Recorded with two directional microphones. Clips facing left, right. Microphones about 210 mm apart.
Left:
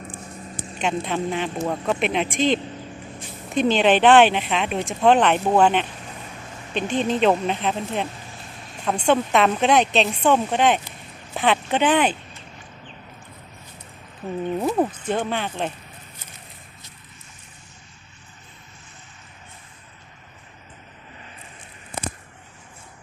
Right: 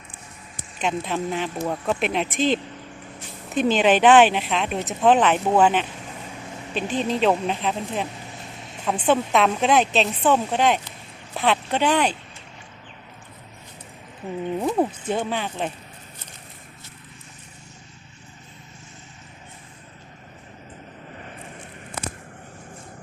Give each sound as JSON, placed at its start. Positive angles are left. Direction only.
{"t": 0.8, "sound": "speech", "side_deg": 0}
{"t": 8.5, "sound": "vehicle", "side_deg": -20}
{"t": 8.8, "sound": "speech", "side_deg": -5}
{"t": 14.8, "sound": "speech", "side_deg": -10}
{"t": 21.2, "sound": "vehicle", "side_deg": -50}